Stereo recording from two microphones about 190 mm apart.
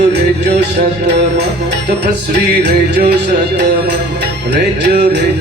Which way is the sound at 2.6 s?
60° right (ahead or behind).